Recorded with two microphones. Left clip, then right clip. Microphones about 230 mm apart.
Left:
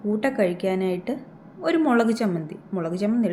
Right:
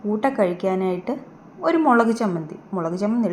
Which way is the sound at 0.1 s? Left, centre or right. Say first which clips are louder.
Right 2 dB; centre.